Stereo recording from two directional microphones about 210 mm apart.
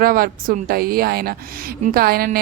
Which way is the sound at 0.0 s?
45° right (ahead or behind).